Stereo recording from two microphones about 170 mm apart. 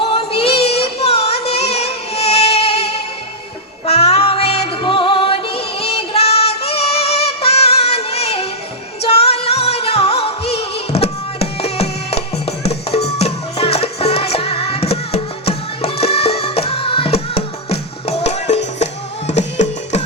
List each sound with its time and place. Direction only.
0.0 s music: 35° left (ahead or behind)